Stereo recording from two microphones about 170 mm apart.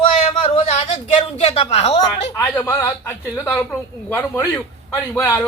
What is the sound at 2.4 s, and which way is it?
A man's voice, 10° left (ahead or behind).